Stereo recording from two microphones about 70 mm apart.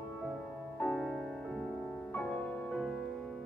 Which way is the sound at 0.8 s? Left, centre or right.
Centre.